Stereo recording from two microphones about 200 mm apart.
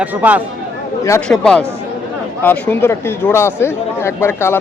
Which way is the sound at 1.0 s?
15° left (ahead or behind).